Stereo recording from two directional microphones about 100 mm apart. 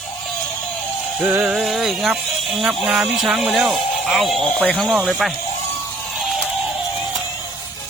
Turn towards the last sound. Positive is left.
turn(degrees=0)  # may be behind; listen again after turning